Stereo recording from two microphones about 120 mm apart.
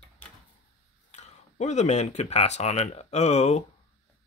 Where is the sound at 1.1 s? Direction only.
70° left (ahead or behind).